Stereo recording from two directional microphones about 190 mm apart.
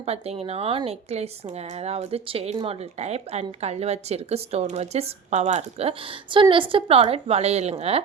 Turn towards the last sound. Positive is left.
turn(degrees=-35)  # may be behind; listen again after turning